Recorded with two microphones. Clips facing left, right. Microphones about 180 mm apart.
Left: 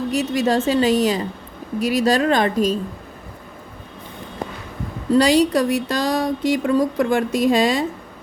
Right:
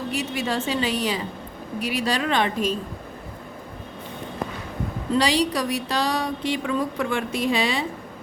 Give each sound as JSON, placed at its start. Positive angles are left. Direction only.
{"t": 0.1, "sound": "a woman's voice", "side_deg": 40}
{"t": 5.1, "sound": "speech", "side_deg": 45}